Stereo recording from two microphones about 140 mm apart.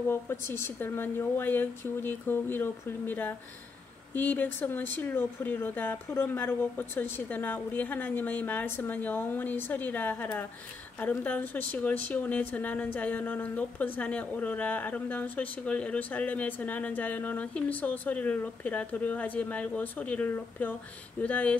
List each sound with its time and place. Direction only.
0.1 s speech: 15° left (ahead or behind)